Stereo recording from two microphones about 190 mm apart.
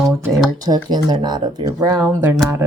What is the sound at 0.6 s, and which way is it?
Speech, 20° right (ahead or behind).